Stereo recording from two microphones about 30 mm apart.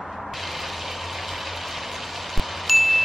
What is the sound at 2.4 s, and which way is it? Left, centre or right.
Wind chime, centre.